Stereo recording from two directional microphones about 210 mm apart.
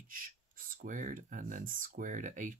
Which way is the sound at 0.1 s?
40° right (ahead or behind).